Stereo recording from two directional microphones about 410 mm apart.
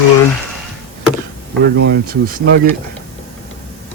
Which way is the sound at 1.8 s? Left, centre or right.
Right.